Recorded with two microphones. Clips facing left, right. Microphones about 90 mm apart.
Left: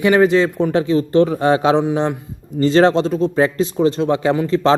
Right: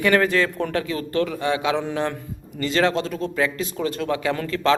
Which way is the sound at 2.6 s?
30° left (ahead or behind).